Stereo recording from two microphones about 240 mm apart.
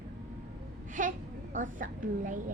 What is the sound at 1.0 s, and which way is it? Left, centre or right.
A child's voice, right.